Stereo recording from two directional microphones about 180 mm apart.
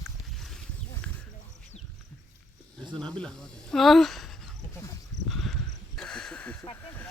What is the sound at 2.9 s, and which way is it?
Speech, 5° left (ahead or behind).